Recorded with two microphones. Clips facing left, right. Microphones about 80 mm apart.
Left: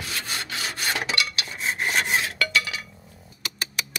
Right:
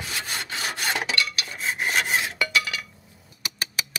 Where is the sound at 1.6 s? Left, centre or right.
Centre.